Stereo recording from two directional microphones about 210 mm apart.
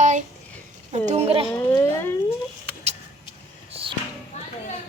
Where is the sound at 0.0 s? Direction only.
35° right (ahead or behind).